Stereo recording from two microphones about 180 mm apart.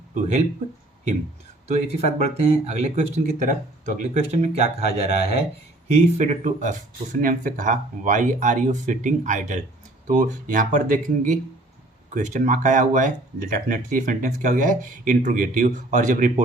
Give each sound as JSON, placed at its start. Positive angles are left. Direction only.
{"t": 0.1, "sound": "speech", "side_deg": -40}
{"t": 1.6, "sound": "speech", "side_deg": -35}
{"t": 12.1, "sound": "speech", "side_deg": -45}